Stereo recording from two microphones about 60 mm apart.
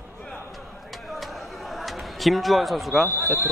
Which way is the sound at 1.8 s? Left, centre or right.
Centre.